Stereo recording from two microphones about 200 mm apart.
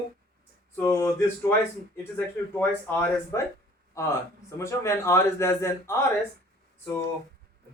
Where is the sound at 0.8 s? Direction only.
10° left (ahead or behind).